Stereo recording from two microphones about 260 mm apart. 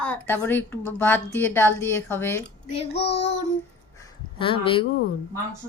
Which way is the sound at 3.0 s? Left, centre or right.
Left.